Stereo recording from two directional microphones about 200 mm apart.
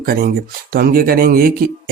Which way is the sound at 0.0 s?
45° right (ahead or behind).